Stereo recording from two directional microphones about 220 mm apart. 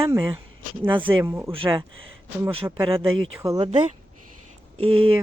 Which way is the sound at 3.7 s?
30° right (ahead or behind).